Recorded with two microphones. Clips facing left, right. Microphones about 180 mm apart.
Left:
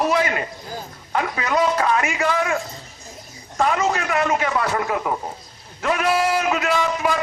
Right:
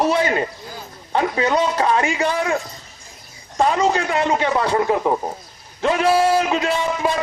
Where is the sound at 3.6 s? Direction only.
25° right (ahead or behind).